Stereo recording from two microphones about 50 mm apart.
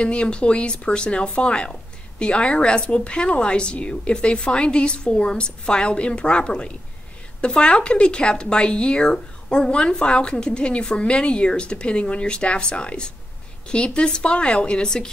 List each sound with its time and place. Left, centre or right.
0.0 s speech: left